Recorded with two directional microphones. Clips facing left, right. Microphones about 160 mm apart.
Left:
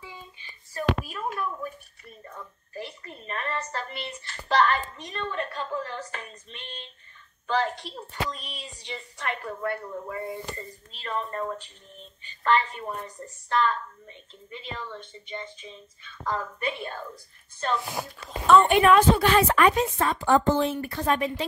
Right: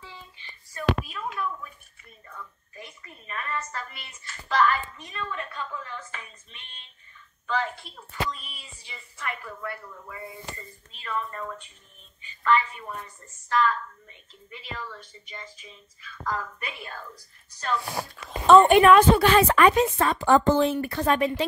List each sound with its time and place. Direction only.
0.0 s a sound: 15° left (ahead or behind)
0.7 s a sound: 45° left (ahead or behind)
7.4 s speech: 30° left (ahead or behind)
8.4 s speech: 70° left (ahead or behind)
8.9 s speech: 30° left (ahead or behind)
18.7 s a woman's voice: 65° right (ahead or behind); by 21.5 s 85° right